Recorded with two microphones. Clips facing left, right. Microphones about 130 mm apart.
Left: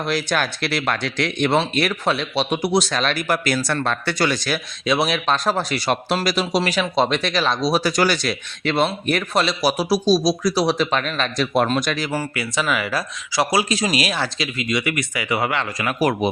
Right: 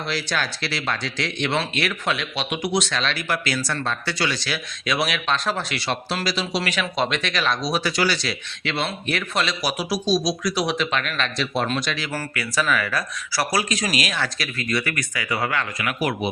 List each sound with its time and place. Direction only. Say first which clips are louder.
0.1 s speech: left 5 dB; 50° left (ahead or behind)
1.5 s speech: left 5 dB; 40° left (ahead or behind)
4.9 s speech: left 4 dB; 30° left (ahead or behind); by 6.1 s 45° left (ahead or behind)
6.6 s speech: left 5 dB; 35° left (ahead or behind)
11.5 s speech: left 6 dB; 50° left (ahead or behind)
12.1 s speech: left 2 dB; 25° left (ahead or behind)
14.4 s speech: left 3 dB; 15° left (ahead or behind)
15.8 s speech: left 7 dB; 35° left (ahead or behind)